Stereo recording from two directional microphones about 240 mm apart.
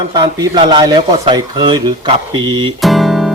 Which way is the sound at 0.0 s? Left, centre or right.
Centre.